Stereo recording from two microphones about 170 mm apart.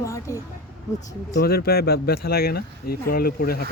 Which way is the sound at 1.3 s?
65° left (ahead or behind).